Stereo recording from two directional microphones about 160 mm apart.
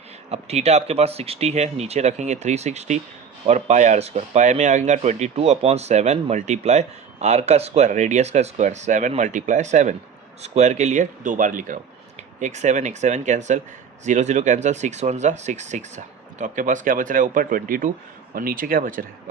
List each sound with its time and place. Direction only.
0.3 s speech: 40° right (ahead or behind); by 19.0 s 60° right (ahead or behind)